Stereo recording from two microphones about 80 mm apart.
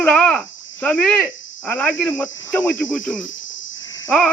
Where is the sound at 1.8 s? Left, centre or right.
Centre.